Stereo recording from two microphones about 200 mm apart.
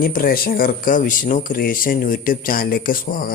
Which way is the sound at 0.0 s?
45° left (ahead or behind).